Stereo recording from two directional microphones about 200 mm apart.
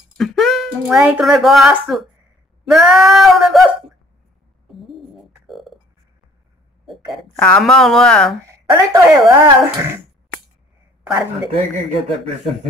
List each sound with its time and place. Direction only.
0.2 s a woman's voice: centre (ahead or behind)
4.6 s a sound: centre (ahead or behind)
7.3 s a woman's voice: 5° left (ahead or behind)
8.5 s speech: 15° right (ahead or behind)
11.5 s speech: 30° right (ahead or behind)